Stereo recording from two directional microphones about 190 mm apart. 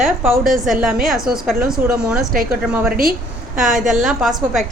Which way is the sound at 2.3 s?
50° right (ahead or behind).